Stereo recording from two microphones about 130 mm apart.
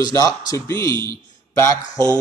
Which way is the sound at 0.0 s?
25° left (ahead or behind).